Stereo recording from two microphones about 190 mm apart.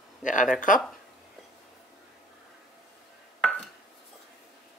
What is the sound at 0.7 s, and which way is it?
Speech, 45° left (ahead or behind).